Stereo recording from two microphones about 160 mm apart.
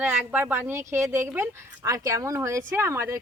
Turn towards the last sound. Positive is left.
turn(degrees=-15)  # may be behind; listen again after turning